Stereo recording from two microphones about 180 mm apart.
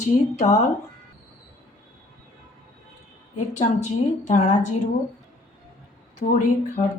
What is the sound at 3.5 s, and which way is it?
A woman's voice, 40° left (ahead or behind).